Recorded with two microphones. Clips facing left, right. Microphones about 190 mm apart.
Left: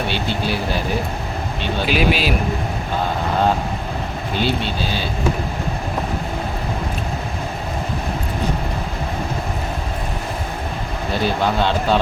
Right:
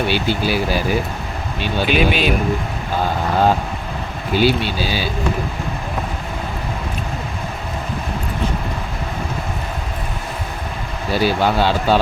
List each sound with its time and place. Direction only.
0.1 s speech: 5° right (ahead or behind)
1.9 s speech: centre (ahead or behind)
4.4 s speech: 5° right (ahead or behind)
11.1 s speech: 5° right (ahead or behind)